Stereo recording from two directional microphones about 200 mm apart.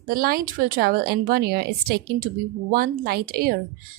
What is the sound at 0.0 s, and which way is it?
Speech, 45° right (ahead or behind).